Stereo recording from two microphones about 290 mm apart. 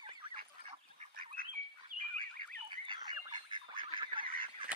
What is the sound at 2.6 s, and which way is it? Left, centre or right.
Frog, centre.